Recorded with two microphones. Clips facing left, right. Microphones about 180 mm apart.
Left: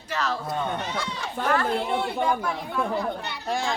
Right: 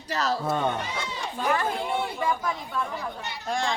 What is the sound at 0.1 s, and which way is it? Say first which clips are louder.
Speech: right 2 dB; 35° right (ahead or behind).